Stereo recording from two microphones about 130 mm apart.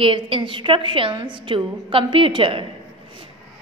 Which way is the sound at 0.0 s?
40° right (ahead or behind).